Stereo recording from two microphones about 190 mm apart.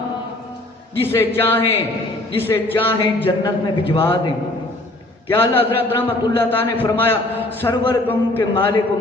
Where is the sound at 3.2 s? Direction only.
25° left (ahead or behind).